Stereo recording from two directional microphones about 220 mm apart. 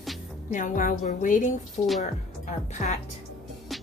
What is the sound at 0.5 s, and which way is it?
Speech, 35° left (ahead or behind).